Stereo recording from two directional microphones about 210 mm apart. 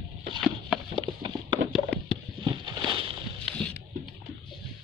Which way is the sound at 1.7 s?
5° left (ahead or behind).